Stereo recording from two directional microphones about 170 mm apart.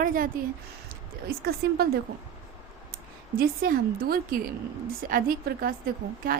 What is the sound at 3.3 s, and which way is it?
A woman's voice, 60° right (ahead or behind).